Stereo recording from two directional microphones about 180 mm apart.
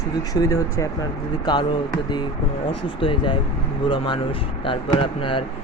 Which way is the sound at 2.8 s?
30° left (ahead or behind).